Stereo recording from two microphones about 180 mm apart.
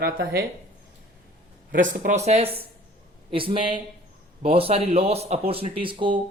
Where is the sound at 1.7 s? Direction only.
50° right (ahead or behind).